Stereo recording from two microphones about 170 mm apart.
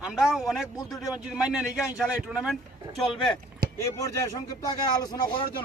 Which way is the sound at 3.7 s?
15° left (ahead or behind).